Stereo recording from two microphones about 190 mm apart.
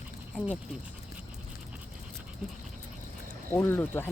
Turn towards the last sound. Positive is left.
turn(degrees=10)  # may be behind; listen again after turning